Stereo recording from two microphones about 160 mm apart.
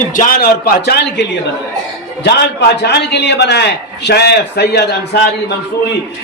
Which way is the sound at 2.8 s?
90° left.